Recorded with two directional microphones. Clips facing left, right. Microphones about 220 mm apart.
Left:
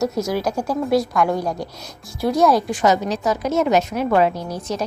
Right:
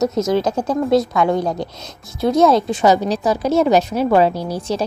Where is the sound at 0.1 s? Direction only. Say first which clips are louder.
Right 4 dB; 20° right (ahead or behind).